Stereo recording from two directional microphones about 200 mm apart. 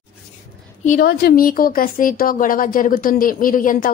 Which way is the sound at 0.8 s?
45° left (ahead or behind).